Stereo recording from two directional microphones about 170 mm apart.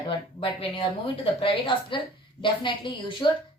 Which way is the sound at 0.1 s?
30° left (ahead or behind).